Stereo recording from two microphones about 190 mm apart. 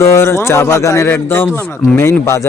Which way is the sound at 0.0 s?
15° left (ahead or behind).